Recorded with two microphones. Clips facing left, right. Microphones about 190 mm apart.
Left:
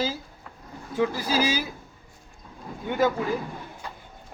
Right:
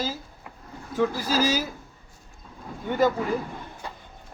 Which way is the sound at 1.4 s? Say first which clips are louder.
Right 2 dB; 45° right (ahead or behind).